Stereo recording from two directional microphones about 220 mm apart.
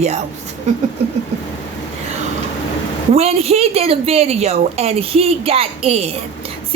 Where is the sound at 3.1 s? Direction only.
30° right (ahead or behind).